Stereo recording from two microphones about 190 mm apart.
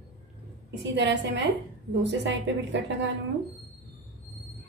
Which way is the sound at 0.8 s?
65° right (ahead or behind).